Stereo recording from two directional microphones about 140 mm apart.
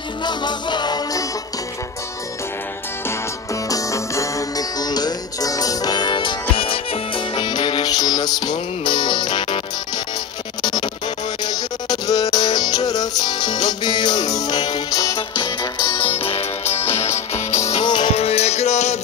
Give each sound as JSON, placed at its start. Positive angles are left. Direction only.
{"t": 0.2, "sound": "music", "side_deg": 30}
{"t": 3.6, "sound": "music", "side_deg": 25}
{"t": 10.6, "sound": "music", "side_deg": 30}
{"t": 16.2, "sound": "music", "side_deg": 45}
{"t": 16.6, "sound": "music", "side_deg": 15}
{"t": 17.6, "sound": "music", "side_deg": 35}
{"t": 18.1, "sound": "music", "side_deg": 50}